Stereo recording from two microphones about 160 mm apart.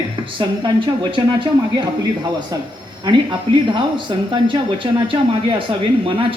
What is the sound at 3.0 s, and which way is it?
Speech, 30° right (ahead or behind).